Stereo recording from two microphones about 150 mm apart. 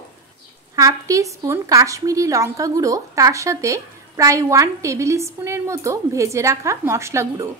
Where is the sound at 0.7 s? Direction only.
20° right (ahead or behind).